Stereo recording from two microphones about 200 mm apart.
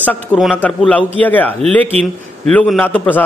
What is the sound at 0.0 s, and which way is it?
A man's voice, 5° left (ahead or behind).